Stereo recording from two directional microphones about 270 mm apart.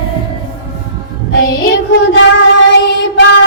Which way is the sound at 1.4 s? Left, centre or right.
Left.